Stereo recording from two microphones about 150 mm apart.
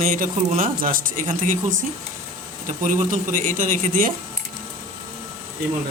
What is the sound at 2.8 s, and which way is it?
A man's voice, 60° right (ahead or behind).